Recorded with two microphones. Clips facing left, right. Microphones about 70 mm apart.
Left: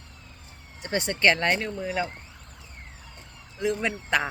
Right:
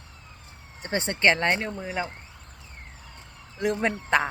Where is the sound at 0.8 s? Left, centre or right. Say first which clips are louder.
Even; right.